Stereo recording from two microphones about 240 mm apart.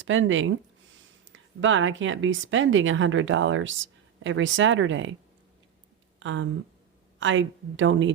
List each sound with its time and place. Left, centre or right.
0.0 s a woman's voice: right
6.1 s a woman's voice: right